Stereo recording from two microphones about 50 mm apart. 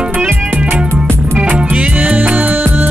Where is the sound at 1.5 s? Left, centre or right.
Right.